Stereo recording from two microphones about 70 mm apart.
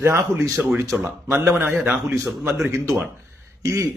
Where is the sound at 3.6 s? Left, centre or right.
Right.